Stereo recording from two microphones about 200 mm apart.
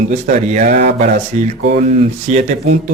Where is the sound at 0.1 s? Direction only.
35° right (ahead or behind).